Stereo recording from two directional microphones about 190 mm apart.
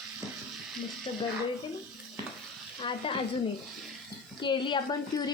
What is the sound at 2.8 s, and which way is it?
Speech, 25° left (ahead or behind).